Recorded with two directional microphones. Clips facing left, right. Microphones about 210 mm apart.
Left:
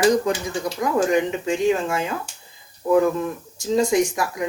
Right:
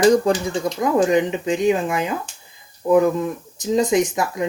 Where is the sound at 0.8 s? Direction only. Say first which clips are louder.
Right 2 dB; 20° right (ahead or behind).